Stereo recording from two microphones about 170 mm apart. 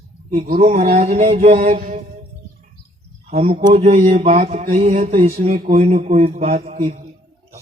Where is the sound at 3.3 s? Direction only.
35° right (ahead or behind).